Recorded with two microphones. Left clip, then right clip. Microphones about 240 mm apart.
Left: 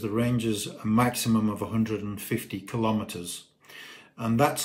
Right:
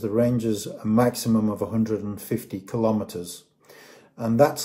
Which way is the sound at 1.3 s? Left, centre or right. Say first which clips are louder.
Right 3 dB; left.